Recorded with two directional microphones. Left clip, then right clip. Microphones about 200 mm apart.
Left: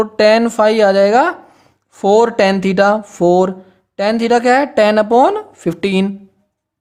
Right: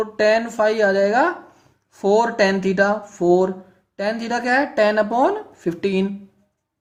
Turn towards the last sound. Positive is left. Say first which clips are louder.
# left 5 dB
turn(degrees=45)  # may be behind; listen again after turning